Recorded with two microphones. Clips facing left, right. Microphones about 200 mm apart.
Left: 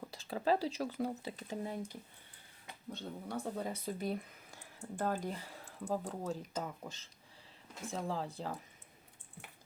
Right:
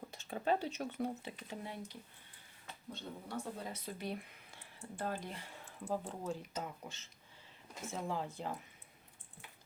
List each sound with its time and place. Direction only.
0.1 s speech: 35° left (ahead or behind)